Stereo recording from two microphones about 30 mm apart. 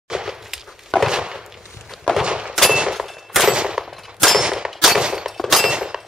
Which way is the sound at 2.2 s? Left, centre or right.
Right.